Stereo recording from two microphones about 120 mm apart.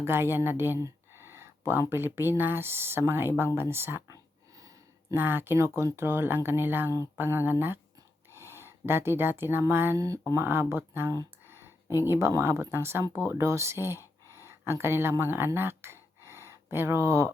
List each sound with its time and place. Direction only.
0.0 s speech: 20° right (ahead or behind)